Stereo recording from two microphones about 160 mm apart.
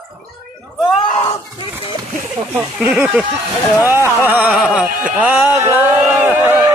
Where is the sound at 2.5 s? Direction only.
10° right (ahead or behind).